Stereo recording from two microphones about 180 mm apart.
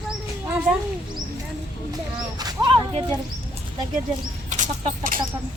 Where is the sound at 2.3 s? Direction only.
20° right (ahead or behind).